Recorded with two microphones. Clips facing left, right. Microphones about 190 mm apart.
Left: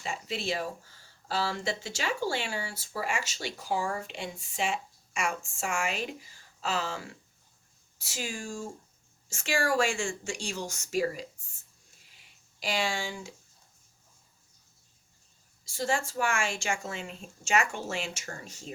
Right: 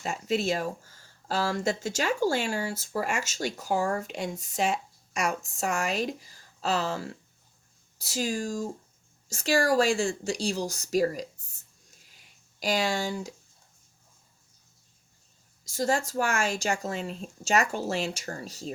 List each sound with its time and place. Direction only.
0.0 s a woman's voice: 45° right (ahead or behind)
12.1 s a sound: 40° right (ahead or behind)
15.6 s a woman's voice: 40° right (ahead or behind)